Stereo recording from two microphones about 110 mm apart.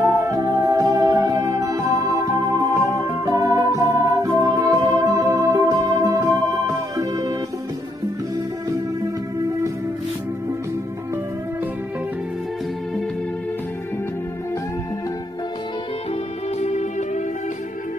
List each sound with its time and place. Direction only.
0.0 s music: 30° right (ahead or behind)
16.5 s music: 90° left